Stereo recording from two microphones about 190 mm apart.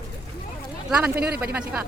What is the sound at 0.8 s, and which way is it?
Speech, 5° right (ahead or behind).